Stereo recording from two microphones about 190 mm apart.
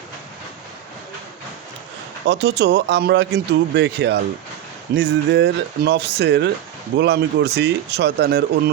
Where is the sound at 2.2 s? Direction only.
65° right (ahead or behind).